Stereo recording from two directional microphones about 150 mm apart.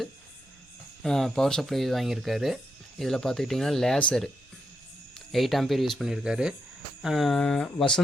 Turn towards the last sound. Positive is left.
turn(degrees=5)  # may be behind; listen again after turning